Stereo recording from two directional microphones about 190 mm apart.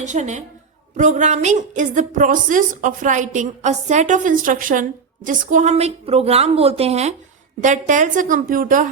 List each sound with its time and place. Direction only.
0.0 s a woman's voice: 40° right (ahead or behind)